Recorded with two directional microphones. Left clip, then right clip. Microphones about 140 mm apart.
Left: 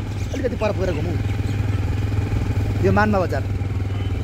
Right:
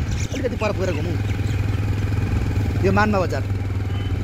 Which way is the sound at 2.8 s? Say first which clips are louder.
Left 1 dB; 40° left (ahead or behind).